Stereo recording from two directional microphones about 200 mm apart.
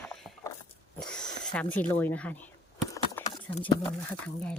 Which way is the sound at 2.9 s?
15° left (ahead or behind).